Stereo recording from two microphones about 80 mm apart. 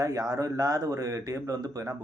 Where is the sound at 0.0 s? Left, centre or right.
Right.